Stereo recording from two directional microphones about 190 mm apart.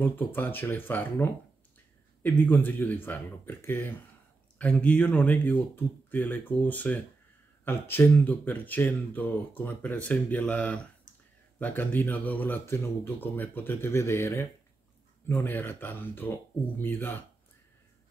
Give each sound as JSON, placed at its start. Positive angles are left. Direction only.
{"t": 0.0, "sound": "speech", "side_deg": 10}